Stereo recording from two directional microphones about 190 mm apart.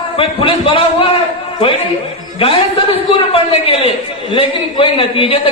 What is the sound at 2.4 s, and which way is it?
A man's voice, 30° left (ahead or behind).